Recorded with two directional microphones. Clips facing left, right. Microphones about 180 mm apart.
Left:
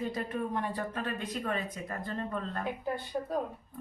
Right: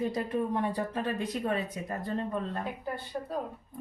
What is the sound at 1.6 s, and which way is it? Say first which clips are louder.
Speech: right 3 dB; 15° right (ahead or behind).